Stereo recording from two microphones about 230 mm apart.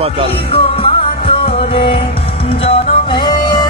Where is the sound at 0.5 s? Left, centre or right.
Left.